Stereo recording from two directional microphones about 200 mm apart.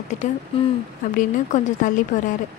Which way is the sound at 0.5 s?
25° left (ahead or behind).